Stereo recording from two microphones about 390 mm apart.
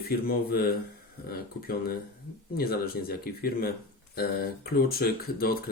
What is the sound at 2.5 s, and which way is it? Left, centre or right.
Speech, left.